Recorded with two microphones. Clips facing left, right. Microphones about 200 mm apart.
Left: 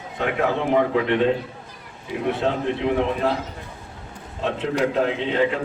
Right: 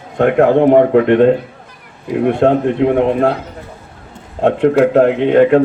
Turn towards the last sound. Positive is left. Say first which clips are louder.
# right 12 dB
turn(degrees=-60)  # may be behind; listen again after turning